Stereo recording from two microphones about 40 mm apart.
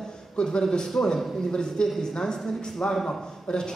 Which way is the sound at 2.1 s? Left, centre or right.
Centre.